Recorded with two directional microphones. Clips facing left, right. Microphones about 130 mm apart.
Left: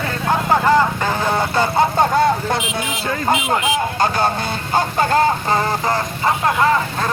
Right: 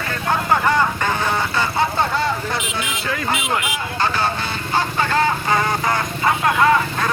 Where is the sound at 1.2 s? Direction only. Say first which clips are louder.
Left 3 dB; 40° left (ahead or behind).